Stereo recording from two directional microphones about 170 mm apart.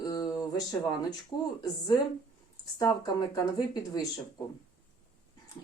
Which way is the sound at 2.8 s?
20° left (ahead or behind).